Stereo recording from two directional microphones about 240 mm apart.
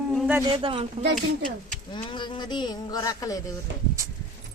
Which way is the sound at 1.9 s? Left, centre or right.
Centre.